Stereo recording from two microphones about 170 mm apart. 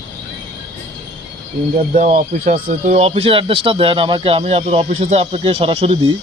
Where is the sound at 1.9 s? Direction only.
55° right (ahead or behind).